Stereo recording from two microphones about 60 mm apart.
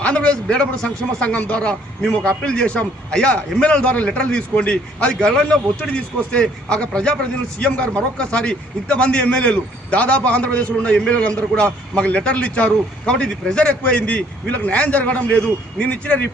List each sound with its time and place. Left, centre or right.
0.0 s a man's voice: centre